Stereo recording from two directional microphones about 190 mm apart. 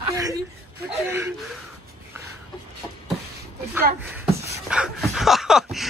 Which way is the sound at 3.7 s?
10° right (ahead or behind).